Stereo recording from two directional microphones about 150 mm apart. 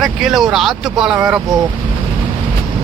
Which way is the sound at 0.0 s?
Centre (ahead or behind).